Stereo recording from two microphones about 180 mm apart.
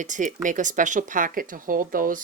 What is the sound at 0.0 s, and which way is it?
Speech, 45° right (ahead or behind).